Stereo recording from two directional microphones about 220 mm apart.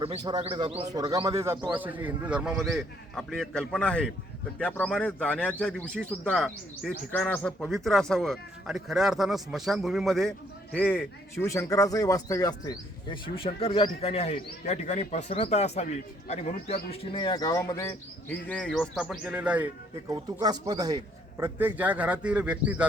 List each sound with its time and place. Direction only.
0.0 s a man's voice: 25° right (ahead or behind); by 19.7 s 5° right (ahead or behind)
20.4 s a man's voice: 15° right (ahead or behind)